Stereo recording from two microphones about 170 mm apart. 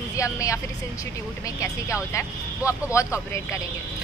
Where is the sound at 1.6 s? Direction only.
15° left (ahead or behind).